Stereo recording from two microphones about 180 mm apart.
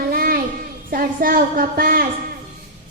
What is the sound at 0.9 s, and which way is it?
A woman's voice, 55° right (ahead or behind).